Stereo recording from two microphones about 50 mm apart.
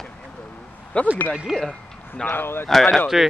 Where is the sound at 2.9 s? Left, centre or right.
Centre.